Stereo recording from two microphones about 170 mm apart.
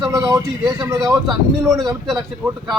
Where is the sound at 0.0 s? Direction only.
25° right (ahead or behind).